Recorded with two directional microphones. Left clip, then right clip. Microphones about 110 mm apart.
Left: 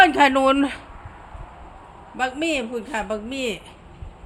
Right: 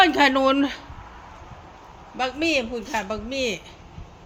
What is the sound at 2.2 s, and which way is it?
A woman's voice, 20° left (ahead or behind).